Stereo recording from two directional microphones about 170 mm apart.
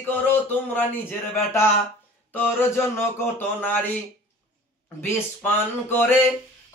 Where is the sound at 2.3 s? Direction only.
10° left (ahead or behind).